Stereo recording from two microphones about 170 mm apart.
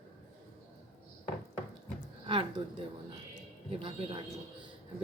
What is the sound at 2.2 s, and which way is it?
Speech, 30° right (ahead or behind).